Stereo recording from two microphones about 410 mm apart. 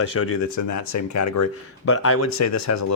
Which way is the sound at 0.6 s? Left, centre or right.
Left.